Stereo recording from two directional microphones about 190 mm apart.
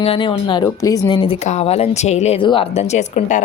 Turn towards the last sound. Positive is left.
turn(degrees=35)  # may be behind; listen again after turning